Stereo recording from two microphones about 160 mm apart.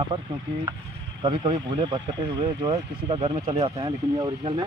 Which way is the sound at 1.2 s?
35° right (ahead or behind).